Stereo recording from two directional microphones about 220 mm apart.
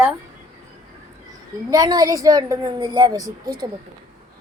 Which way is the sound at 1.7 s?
15° right (ahead or behind).